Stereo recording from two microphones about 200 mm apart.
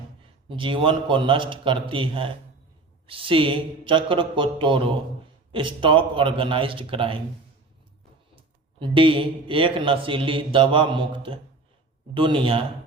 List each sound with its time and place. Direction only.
0.4 s a man's voice: 25° right (ahead or behind)
8.8 s a man's voice: 25° right (ahead or behind)